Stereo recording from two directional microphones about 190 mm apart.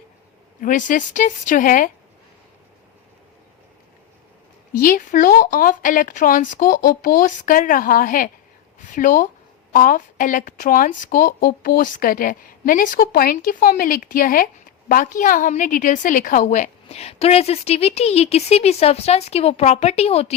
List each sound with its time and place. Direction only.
0.6 s a woman's voice: 45° left (ahead or behind)
4.8 s a woman's voice: 45° left (ahead or behind)